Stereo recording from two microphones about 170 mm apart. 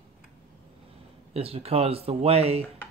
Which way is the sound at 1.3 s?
35° right (ahead or behind).